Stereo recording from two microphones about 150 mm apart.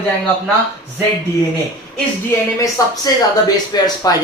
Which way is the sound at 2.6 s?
25° left (ahead or behind).